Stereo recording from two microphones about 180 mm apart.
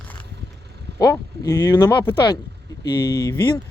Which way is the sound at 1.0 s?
20° left (ahead or behind).